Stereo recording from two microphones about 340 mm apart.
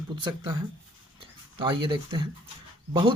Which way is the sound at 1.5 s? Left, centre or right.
Centre.